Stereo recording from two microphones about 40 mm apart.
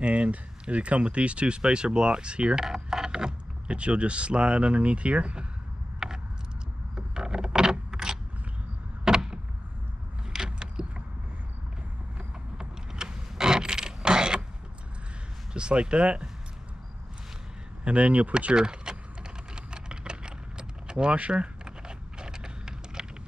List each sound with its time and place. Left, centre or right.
0.0 s speech: right
2.6 s a sound: centre
3.6 s speech: right
5.9 s a sound: centre
10.3 s vehicle: centre
12.5 s mechanisms: centre
15.5 s speech: right
17.8 s speech: right
18.5 s speech: right
19.5 s keys jangling: right
21.2 s a sound: right